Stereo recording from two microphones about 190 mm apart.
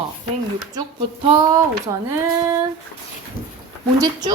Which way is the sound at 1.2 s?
20° right (ahead or behind).